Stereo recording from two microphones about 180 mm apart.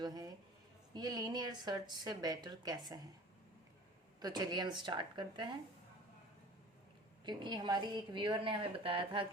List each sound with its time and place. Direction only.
0.0 s a sound: 20° right (ahead or behind)
0.9 s a woman's voice: 20° right (ahead or behind)
4.2 s a woman's voice: 20° right (ahead or behind)
7.3 s a woman's voice: 25° right (ahead or behind)